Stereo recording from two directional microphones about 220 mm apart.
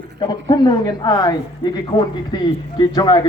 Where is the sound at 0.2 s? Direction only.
20° left (ahead or behind).